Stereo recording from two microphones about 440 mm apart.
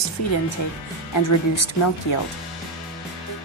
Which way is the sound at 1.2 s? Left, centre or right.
Left.